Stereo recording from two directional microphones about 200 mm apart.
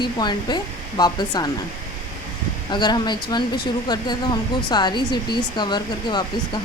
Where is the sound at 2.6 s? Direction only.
20° left (ahead or behind).